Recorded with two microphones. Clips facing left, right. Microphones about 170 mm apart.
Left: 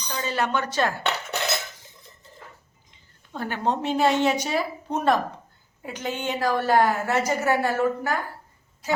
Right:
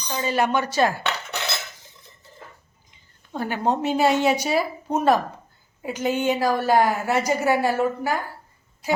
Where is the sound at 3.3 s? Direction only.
10° right (ahead or behind).